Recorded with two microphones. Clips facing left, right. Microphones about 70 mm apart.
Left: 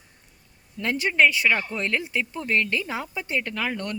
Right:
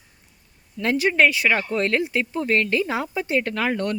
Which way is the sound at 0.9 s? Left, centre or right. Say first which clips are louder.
Right 2 dB; centre.